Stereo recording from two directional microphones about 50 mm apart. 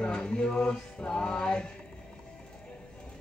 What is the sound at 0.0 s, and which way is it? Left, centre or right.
Music, centre.